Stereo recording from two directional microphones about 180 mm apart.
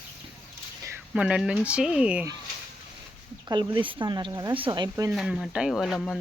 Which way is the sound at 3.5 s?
25° right (ahead or behind).